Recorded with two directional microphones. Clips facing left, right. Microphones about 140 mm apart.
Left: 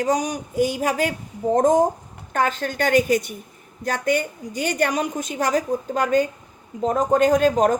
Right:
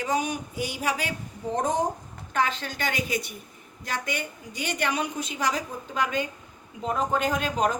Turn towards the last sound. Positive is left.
turn(degrees=45)  # may be behind; listen again after turning